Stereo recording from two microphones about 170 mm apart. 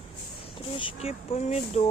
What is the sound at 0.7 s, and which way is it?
Speech, 35° left (ahead or behind).